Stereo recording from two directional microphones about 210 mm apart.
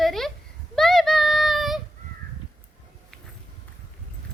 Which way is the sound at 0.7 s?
Centre (ahead or behind).